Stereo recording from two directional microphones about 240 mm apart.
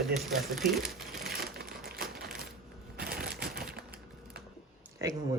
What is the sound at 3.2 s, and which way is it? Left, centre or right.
Typewriter, right.